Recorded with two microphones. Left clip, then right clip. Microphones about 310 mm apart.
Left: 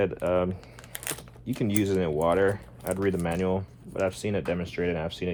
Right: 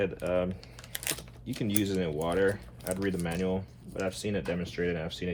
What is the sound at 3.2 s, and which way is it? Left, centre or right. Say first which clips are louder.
Speech: left 4 dB; centre.